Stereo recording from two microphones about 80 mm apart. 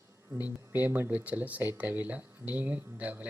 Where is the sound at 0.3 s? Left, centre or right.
Right.